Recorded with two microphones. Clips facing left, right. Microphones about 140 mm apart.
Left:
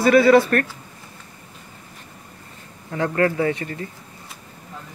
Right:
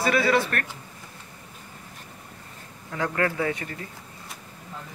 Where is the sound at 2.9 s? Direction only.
35° left (ahead or behind).